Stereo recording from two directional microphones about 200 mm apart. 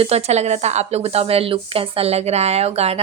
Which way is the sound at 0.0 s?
30° right (ahead or behind).